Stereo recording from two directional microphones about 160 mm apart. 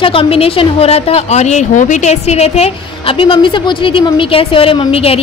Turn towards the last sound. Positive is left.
turn(degrees=35)  # may be behind; listen again after turning